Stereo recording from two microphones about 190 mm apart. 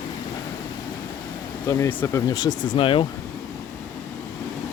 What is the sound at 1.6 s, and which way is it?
Speech, 15° left (ahead or behind).